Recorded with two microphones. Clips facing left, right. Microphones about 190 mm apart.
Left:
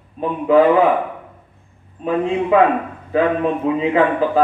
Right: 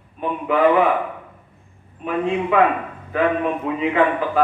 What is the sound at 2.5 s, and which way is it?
A man's voice, 30° left (ahead or behind).